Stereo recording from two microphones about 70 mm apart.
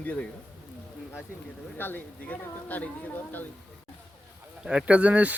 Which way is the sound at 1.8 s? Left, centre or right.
Left.